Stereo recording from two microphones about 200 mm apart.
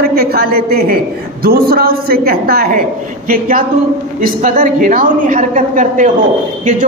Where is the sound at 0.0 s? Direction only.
50° right (ahead or behind).